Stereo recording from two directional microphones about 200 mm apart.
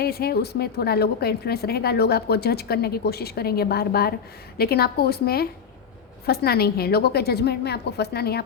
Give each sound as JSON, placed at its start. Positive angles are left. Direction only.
{"t": 0.0, "sound": "a woman's voice", "side_deg": 50}